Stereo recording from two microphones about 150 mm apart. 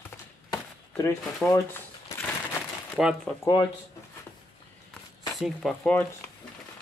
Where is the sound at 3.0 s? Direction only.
Centre (ahead or behind).